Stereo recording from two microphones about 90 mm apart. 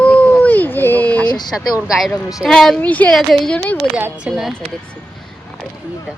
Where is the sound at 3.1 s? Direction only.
Centre (ahead or behind).